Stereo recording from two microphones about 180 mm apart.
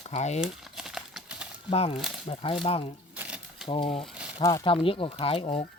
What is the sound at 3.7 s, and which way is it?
Speech, 30° left (ahead or behind).